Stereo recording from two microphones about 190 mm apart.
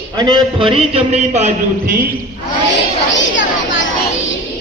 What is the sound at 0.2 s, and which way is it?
A man's voice, 25° right (ahead or behind).